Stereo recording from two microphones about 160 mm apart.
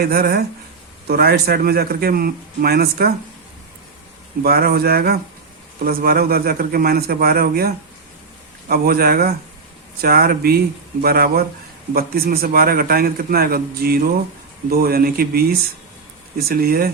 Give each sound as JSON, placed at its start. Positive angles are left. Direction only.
{"t": 0.0, "sound": "a man's voice", "side_deg": -70}
{"t": 4.4, "sound": "a man's voice", "side_deg": -70}
{"t": 8.7, "sound": "a man's voice", "side_deg": -70}